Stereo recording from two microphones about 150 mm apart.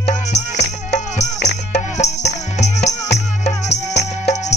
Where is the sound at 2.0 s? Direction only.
50° left (ahead or behind).